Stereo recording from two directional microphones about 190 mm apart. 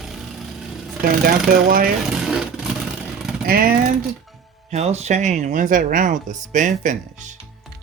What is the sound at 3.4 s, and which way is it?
Speech, 50° right (ahead or behind).